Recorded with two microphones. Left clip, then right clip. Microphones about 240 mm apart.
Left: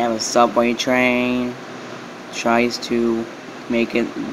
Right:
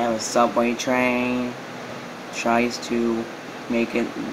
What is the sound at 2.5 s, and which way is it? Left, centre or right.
Speech, centre.